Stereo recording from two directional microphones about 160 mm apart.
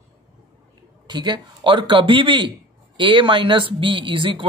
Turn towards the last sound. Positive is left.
turn(degrees=-35)  # may be behind; listen again after turning